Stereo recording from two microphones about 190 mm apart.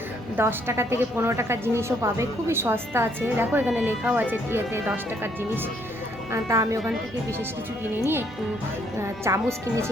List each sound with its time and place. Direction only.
0.3 s a woman's voice: 15° right (ahead or behind)
6.3 s a woman's voice: 15° right (ahead or behind)
9.0 s a woman's voice: 15° right (ahead or behind)